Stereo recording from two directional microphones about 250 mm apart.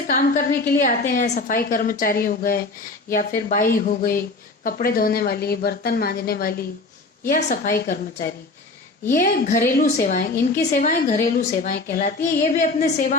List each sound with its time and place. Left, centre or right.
0.1 s a woman's voice: left